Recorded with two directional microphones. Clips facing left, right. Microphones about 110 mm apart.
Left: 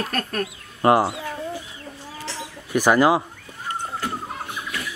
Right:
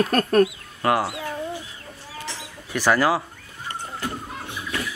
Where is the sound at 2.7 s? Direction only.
15° left (ahead or behind).